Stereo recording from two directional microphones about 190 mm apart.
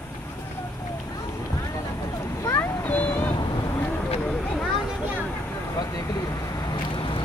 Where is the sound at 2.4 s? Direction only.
10° left (ahead or behind).